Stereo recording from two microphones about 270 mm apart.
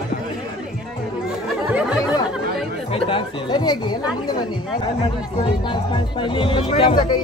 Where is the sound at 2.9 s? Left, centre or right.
Centre.